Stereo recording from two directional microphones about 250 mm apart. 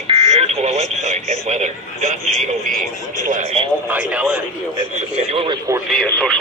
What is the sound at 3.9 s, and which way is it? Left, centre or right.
Speech, centre.